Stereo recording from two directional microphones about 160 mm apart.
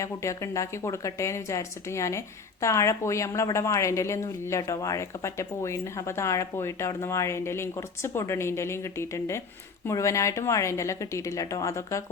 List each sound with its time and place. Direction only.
0.0 s a woman's voice: 20° left (ahead or behind)